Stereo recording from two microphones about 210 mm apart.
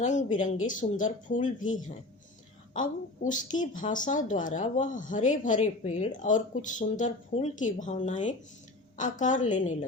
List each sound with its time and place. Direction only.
0.0 s speech: 35° left (ahead or behind)
2.7 s speech: 40° left (ahead or behind)